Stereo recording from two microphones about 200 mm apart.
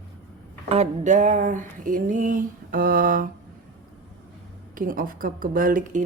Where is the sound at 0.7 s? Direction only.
35° right (ahead or behind).